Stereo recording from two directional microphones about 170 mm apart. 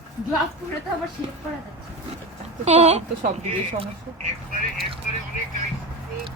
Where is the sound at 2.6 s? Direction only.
40° right (ahead or behind).